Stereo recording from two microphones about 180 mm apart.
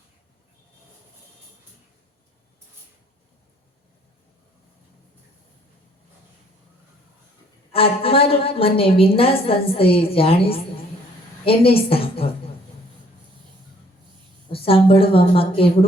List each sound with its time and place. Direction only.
7.7 s a woman's voice: 30° left (ahead or behind)
14.5 s a woman's voice: 30° left (ahead or behind)